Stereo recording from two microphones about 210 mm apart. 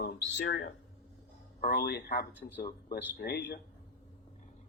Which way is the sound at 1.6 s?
45° left (ahead or behind).